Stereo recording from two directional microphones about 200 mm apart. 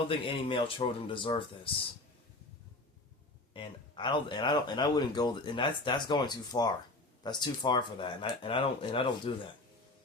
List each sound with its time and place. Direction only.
0.1 s speech: 25° left (ahead or behind)
3.5 s speech: 25° left (ahead or behind)